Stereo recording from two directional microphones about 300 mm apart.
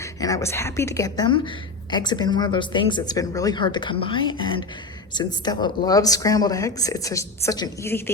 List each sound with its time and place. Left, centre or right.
0.0 s a woman's voice: centre